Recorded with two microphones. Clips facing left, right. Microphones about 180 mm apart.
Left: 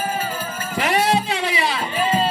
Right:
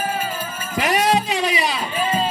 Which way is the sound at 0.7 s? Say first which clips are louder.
Right 1 dB; 15° right (ahead or behind).